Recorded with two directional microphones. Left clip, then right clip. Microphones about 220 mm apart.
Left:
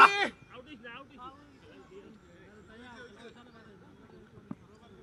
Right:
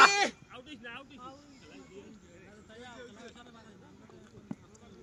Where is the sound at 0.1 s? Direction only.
35° right (ahead or behind).